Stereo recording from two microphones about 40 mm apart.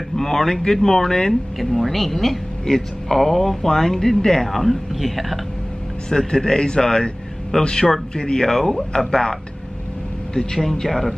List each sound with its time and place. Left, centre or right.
0.1 s speech: centre
4.5 s speech: centre
6.0 s a man's voice: centre